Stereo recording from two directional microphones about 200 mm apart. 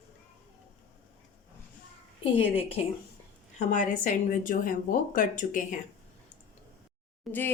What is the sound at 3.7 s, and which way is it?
A woman's voice, 40° left (ahead or behind).